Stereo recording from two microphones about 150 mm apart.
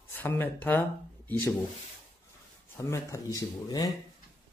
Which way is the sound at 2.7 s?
20° left (ahead or behind).